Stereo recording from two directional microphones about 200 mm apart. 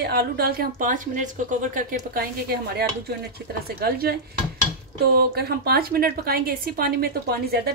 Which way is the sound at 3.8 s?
50° right (ahead or behind).